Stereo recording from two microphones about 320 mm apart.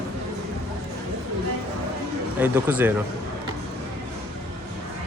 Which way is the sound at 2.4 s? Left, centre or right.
Centre.